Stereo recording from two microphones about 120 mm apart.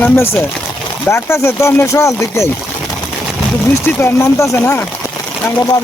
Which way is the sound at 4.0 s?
25° left (ahead or behind).